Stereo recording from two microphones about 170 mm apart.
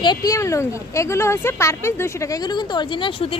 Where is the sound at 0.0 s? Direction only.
25° left (ahead or behind).